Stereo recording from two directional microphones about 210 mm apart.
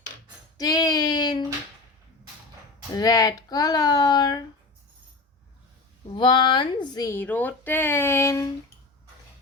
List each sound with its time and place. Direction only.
0.5 s child singing: 20° left (ahead or behind)
2.9 s speech: 15° left (ahead or behind)
6.1 s speech: 20° left (ahead or behind)